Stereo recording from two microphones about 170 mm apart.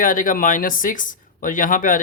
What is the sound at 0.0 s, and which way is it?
Speech, 55° left (ahead or behind).